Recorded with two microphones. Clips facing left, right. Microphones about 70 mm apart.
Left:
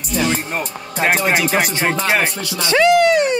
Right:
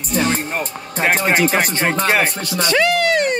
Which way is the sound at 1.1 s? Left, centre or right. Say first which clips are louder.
Right 1 dB; right.